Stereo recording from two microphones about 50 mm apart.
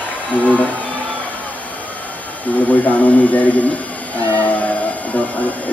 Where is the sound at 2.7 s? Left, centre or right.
Left.